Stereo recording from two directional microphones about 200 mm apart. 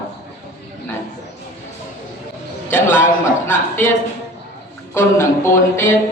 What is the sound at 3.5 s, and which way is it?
Speech, 10° left (ahead or behind).